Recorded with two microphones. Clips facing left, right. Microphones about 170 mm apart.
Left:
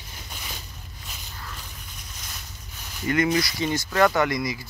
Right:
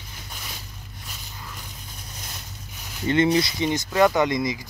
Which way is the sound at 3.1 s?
25° right (ahead or behind).